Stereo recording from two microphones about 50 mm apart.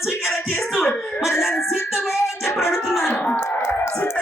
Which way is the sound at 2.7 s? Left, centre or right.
Centre.